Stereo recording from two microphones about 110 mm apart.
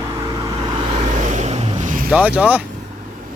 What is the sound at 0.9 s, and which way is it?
Vehicle, 85° right.